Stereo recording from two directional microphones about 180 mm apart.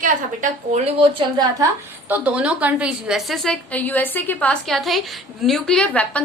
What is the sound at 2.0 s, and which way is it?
A woman's voice, 10° right (ahead or behind).